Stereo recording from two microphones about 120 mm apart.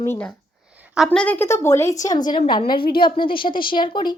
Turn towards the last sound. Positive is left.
turn(degrees=40)  # may be behind; listen again after turning